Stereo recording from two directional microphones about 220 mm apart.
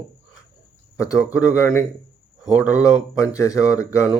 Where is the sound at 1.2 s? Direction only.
15° left (ahead or behind).